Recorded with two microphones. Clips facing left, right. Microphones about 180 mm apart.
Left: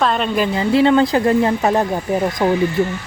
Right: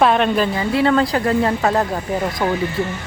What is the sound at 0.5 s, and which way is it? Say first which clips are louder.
Speech: left 6 dB; 25° left (ahead or behind).